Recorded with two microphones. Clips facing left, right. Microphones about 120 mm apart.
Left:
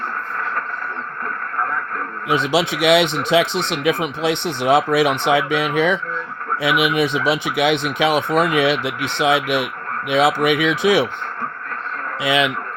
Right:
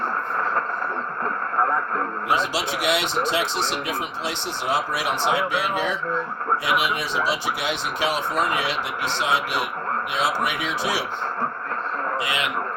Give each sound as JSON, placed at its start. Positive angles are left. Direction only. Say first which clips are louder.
{"t": 2.3, "sound": "speech", "louder": "left 7 dB", "side_deg": 65}
{"t": 12.2, "sound": "speech", "louder": "left 8 dB", "side_deg": 80}